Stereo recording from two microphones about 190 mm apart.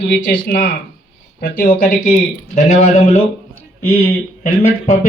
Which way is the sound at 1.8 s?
40° left (ahead or behind).